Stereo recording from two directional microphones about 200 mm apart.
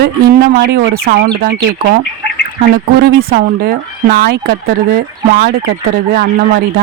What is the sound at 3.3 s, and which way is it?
Speech, 50° right (ahead or behind).